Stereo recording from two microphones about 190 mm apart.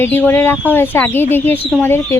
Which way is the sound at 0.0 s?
10° left (ahead or behind).